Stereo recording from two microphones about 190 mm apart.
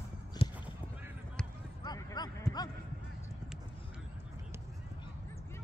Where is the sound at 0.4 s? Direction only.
30° left (ahead or behind).